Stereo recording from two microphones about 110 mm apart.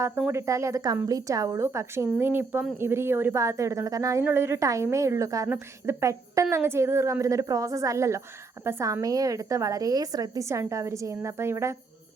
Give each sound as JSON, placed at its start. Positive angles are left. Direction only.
{"t": 0.0, "sound": "speech", "side_deg": -25}